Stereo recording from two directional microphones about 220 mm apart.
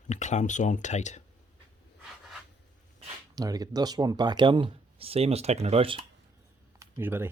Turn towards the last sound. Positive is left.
turn(degrees=-10)  # may be behind; listen again after turning